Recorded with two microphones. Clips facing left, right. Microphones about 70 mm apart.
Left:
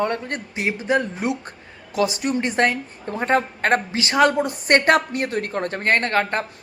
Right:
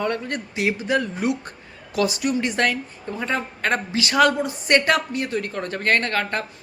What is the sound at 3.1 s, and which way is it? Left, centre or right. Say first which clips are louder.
Speech: left 6 dB; left.